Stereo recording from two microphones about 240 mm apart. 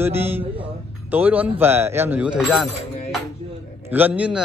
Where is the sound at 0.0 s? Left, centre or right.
Centre.